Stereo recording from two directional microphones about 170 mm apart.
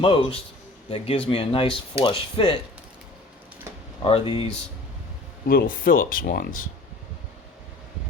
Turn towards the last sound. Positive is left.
turn(degrees=60)  # may be behind; listen again after turning